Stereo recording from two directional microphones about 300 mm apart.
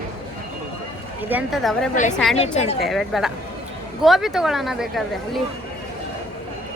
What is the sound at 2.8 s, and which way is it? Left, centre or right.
Speech, centre.